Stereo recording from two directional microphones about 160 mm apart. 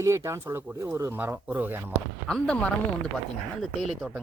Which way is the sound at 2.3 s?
5° left (ahead or behind).